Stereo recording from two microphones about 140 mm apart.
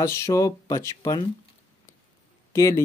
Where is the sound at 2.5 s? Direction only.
25° left (ahead or behind).